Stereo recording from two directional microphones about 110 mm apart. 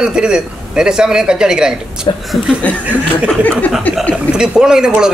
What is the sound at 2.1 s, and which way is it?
Speech, 45° left (ahead or behind).